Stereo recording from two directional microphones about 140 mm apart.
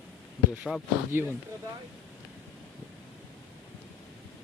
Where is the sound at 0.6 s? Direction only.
10° right (ahead or behind).